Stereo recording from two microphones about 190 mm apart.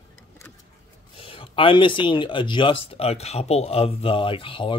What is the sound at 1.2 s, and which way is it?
Speech, 30° left (ahead or behind).